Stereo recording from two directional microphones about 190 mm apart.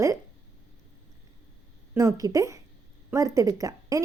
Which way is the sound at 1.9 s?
15° right (ahead or behind).